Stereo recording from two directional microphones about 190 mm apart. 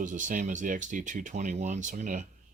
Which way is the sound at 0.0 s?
40° right (ahead or behind).